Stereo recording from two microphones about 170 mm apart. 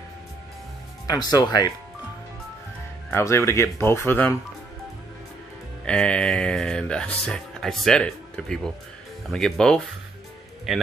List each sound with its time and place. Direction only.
1.0 s speech: 25° left (ahead or behind)
3.1 s speech: 15° left (ahead or behind)
5.9 s speech: 5° left (ahead or behind)